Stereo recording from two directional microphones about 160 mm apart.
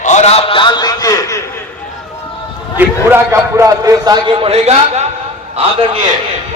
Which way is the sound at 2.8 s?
15° right (ahead or behind).